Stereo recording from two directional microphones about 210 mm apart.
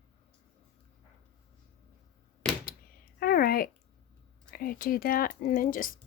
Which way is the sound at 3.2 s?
45° left (ahead or behind).